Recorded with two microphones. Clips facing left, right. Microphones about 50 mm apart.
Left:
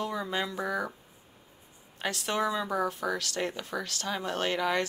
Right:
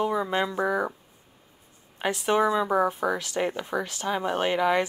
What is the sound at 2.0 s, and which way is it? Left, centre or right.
Speech, centre.